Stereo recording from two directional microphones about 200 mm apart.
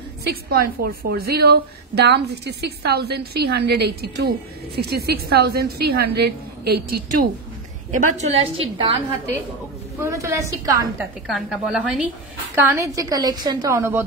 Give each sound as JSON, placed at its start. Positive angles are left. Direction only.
{"t": 0.2, "sound": "a woman's voice", "side_deg": -50}
{"t": 7.9, "sound": "a woman's voice", "side_deg": -40}
{"t": 8.5, "sound": "a woman's voice", "side_deg": -25}
{"t": 9.9, "sound": "a woman's voice", "side_deg": -15}
{"t": 11.2, "sound": "a woman's voice", "side_deg": 0}